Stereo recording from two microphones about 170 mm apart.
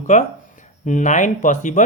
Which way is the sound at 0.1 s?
45° left (ahead or behind).